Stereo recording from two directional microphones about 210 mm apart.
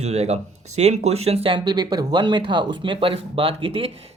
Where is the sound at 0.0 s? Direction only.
30° right (ahead or behind).